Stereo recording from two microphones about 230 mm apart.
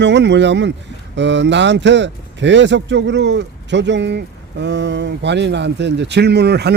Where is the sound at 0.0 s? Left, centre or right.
Right.